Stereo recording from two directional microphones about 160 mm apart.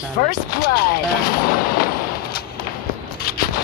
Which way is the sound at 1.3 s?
65° left (ahead or behind).